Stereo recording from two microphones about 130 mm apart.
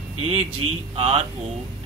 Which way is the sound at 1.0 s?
45° right (ahead or behind).